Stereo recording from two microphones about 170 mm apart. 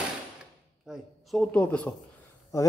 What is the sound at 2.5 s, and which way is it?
Speech, 20° left (ahead or behind).